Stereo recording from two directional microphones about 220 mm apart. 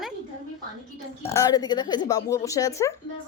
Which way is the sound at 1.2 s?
15° left (ahead or behind).